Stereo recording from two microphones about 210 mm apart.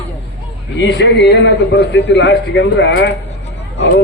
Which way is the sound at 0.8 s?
55° left (ahead or behind).